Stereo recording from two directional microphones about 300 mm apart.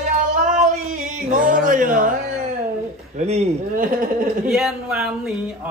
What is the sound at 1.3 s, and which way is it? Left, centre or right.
Speech, right.